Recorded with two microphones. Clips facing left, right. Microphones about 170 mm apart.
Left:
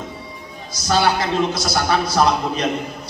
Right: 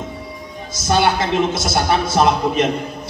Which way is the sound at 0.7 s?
20° right (ahead or behind).